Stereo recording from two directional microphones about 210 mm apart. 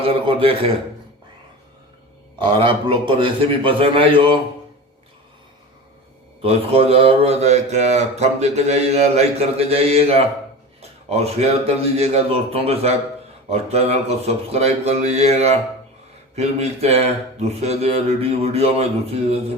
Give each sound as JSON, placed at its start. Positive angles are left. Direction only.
{"t": 0.0, "sound": "a man's voice", "side_deg": -25}
{"t": 2.4, "sound": "a man's voice", "side_deg": -25}
{"t": 6.4, "sound": "a man's voice", "side_deg": -25}